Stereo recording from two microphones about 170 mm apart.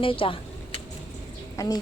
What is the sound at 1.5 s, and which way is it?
Speech, 20° left (ahead or behind).